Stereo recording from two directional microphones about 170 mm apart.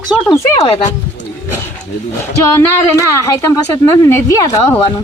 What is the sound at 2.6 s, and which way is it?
Speech, 20° left (ahead or behind).